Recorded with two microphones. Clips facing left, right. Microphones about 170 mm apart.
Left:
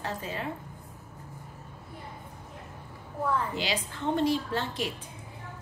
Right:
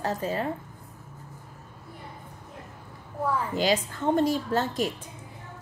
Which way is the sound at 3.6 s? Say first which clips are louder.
Right 7 dB; 45° right (ahead or behind).